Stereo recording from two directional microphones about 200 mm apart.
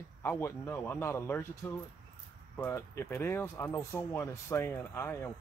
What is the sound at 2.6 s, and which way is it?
Speech, 10° left (ahead or behind).